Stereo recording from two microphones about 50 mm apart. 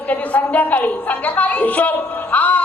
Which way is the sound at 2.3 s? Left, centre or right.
Left.